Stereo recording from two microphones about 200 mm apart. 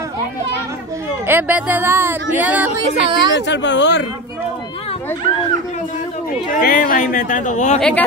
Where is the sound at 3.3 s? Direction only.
60° left (ahead or behind).